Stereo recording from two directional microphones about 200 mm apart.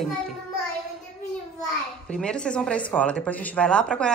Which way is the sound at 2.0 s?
5° left (ahead or behind).